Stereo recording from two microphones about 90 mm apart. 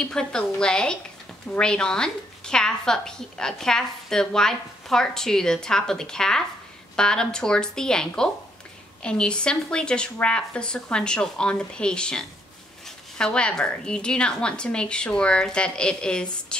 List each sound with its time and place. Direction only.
0.0 s a woman's voice: 10° left (ahead or behind)